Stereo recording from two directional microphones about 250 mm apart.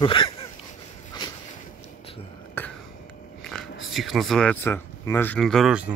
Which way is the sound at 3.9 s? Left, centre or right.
Centre.